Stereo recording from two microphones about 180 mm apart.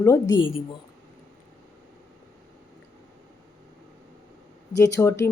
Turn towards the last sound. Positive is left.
turn(degrees=20)  # may be behind; listen again after turning